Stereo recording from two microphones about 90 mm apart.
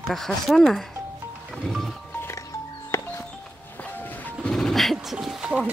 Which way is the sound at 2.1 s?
30° left (ahead or behind).